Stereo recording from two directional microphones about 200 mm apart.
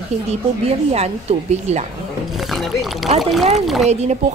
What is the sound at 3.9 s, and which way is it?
Speech, 35° right (ahead or behind).